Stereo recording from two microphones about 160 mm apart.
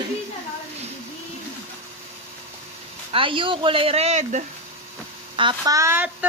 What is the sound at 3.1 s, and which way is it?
Speech, 35° right (ahead or behind).